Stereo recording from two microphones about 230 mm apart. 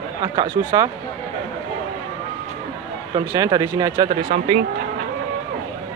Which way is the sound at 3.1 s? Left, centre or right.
Centre.